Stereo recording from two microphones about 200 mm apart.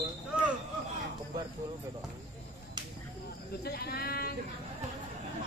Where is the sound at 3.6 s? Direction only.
50° left (ahead or behind).